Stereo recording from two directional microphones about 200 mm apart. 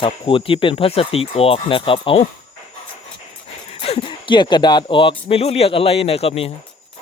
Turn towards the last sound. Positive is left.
turn(degrees=30)  # may be behind; listen again after turning